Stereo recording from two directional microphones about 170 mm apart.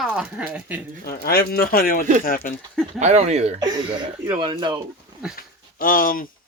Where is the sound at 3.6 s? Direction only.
25° right (ahead or behind).